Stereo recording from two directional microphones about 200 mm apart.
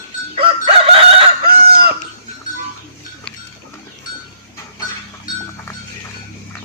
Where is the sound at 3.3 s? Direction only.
5° left (ahead or behind).